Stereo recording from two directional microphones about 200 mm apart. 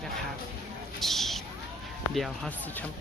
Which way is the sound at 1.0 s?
Centre (ahead or behind).